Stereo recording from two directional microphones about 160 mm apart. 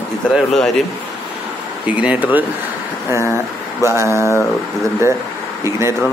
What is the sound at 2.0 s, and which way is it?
Speech, 10° right (ahead or behind).